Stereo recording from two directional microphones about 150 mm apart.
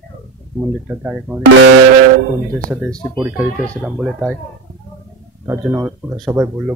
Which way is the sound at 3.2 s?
10° right (ahead or behind).